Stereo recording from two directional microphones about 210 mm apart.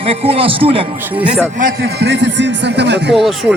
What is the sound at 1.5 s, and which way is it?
A man's voice, 45° right (ahead or behind).